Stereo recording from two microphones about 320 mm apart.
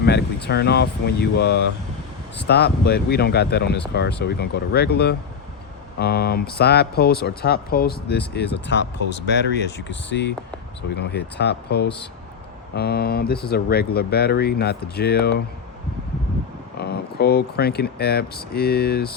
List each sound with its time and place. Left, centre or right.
0.0 s speech: left
16.7 s speech: left